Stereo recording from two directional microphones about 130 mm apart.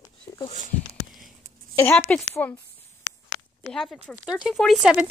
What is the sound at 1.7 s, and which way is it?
Speech, 20° left (ahead or behind).